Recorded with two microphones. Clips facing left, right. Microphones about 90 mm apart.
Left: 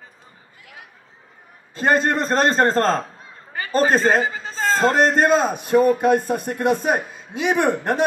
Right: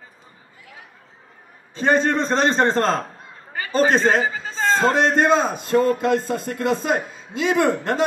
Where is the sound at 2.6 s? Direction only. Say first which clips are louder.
Left 1 dB; 45° left (ahead or behind).